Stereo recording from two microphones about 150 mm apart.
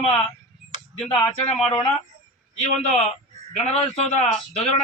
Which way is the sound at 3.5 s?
45° left (ahead or behind).